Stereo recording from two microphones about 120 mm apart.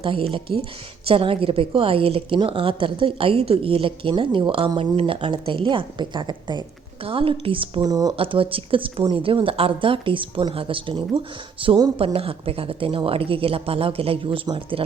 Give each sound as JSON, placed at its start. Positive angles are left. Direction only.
{"t": 0.0, "sound": "speech", "side_deg": -50}
{"t": 7.8, "sound": "speech", "side_deg": -35}
{"t": 8.1, "sound": "speech", "side_deg": -50}